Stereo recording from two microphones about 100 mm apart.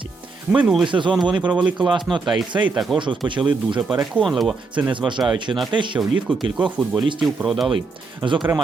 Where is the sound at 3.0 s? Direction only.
55° right (ahead or behind).